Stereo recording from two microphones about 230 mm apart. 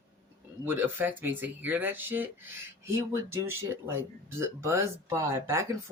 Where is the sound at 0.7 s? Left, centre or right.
Centre.